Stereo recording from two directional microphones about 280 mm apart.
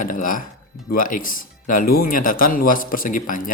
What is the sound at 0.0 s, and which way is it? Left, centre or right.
Speech, left.